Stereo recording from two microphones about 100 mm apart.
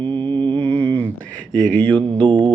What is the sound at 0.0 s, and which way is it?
Mantra, 55° right (ahead or behind).